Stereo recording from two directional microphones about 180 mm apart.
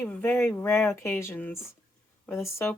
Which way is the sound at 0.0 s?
10° left (ahead or behind).